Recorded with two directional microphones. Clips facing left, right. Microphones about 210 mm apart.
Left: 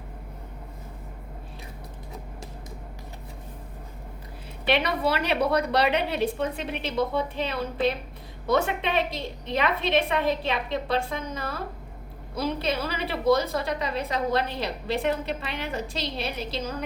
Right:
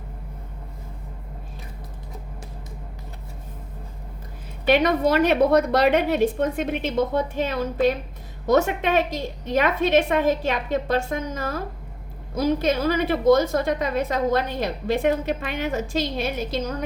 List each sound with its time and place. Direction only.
4.6 s a woman's voice: 45° right (ahead or behind)